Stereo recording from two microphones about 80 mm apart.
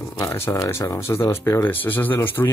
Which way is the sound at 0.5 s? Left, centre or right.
Left.